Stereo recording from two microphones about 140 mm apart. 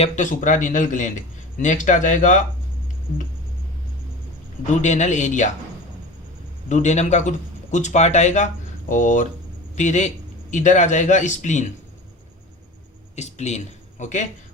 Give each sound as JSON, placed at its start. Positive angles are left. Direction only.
{"t": 0.0, "sound": "speech", "side_deg": 60}
{"t": 4.8, "sound": "speech", "side_deg": 55}
{"t": 6.7, "sound": "speech", "side_deg": 55}
{"t": 13.1, "sound": "speech", "side_deg": 55}